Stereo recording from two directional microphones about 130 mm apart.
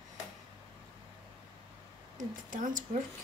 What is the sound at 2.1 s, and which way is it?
Speech, 80° right.